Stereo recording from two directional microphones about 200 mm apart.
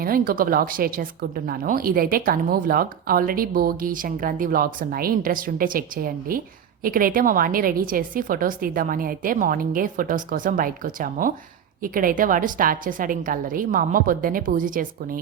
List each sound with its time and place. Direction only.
0.0 s speech: 45° right (ahead or behind)